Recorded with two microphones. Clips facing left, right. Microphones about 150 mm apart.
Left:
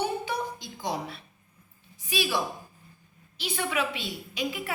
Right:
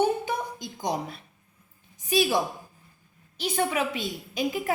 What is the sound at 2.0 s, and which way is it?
A woman's voice, 45° right (ahead or behind).